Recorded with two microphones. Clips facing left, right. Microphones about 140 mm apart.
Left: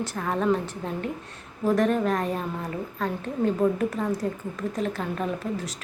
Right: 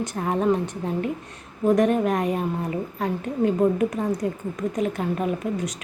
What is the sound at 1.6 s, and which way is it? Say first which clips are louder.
A woman's voice: right 3 dB; 15° right (ahead or behind).